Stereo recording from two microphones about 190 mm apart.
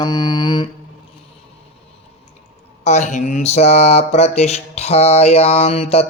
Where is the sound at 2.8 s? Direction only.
40° left (ahead or behind).